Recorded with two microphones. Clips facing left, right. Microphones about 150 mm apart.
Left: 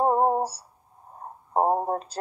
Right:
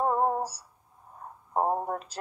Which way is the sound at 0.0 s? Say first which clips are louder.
Left 4 dB; 30° left (ahead or behind).